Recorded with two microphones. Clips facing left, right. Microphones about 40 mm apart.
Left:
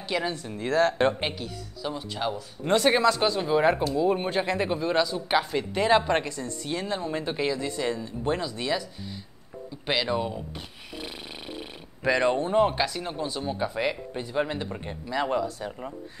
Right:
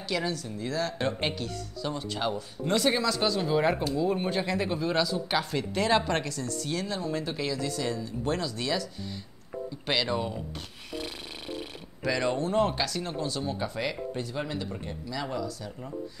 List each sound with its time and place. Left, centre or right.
0.1 s speech: left
0.5 s speech: left
1.2 s speech: centre
2.6 s speech: left; by 10.4 s centre
12.0 s speech: left